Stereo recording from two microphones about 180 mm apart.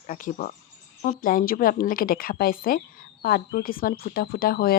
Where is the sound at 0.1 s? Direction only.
45° left (ahead or behind).